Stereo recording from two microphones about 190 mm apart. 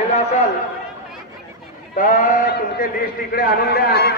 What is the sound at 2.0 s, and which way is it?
A man's voice, 45° left (ahead or behind).